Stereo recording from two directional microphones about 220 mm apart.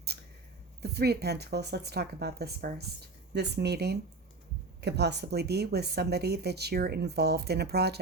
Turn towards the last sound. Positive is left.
turn(degrees=-45)  # may be behind; listen again after turning